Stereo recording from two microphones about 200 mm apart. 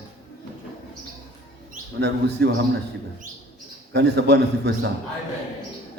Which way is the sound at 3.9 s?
55° right (ahead or behind).